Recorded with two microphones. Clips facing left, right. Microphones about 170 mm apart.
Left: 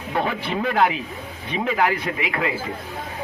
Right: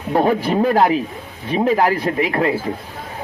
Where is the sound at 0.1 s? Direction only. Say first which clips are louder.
Right 8 dB; 40° right (ahead or behind).